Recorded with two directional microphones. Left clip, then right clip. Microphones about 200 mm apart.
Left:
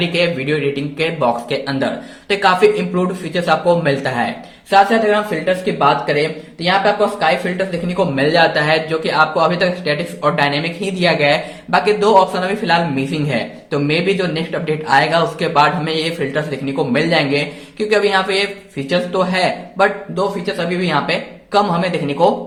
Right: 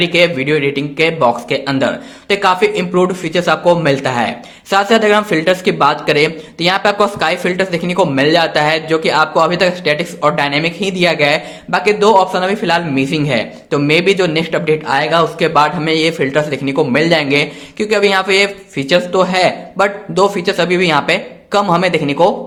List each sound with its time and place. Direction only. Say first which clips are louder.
0.0 s speech: right 5 dB; 25° right (ahead or behind)